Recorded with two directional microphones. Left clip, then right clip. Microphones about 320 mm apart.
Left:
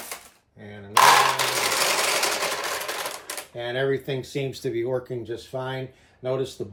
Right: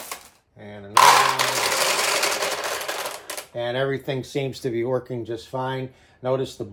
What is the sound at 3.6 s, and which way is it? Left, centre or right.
Speech, right.